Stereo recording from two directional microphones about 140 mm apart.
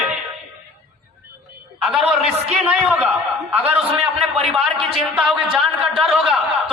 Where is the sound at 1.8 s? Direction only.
Centre (ahead or behind).